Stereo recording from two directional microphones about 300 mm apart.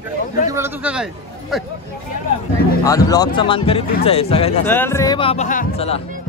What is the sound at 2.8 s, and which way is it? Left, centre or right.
Speech, centre.